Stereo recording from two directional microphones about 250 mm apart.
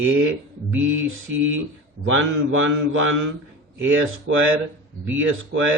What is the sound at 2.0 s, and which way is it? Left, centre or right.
Speech, right.